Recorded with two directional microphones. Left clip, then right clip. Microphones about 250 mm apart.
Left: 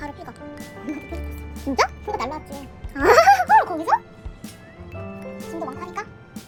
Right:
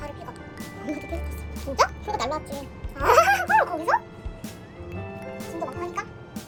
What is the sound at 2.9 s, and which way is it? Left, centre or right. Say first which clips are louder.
Music: left 5 dB; left.